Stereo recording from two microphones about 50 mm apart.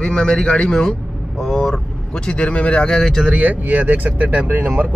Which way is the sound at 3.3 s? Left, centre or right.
Right.